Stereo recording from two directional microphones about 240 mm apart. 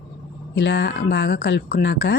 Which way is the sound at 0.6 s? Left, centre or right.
Left.